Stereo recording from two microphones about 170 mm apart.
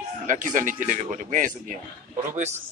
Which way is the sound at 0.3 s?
50° right (ahead or behind).